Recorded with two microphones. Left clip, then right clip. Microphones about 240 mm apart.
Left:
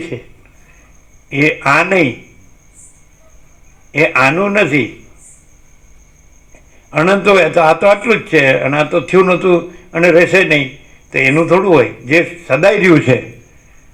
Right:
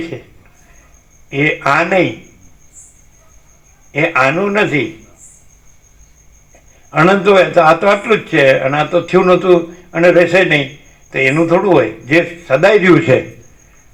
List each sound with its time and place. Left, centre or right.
1.3 s a man's voice: left
3.9 s a man's voice: left
6.9 s a man's voice: left